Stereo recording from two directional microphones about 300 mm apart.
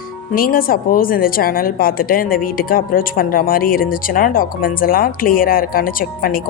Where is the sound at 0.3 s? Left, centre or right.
Left.